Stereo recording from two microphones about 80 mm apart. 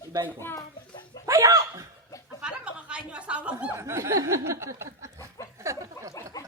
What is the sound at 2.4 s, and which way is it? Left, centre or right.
Chuckle, centre.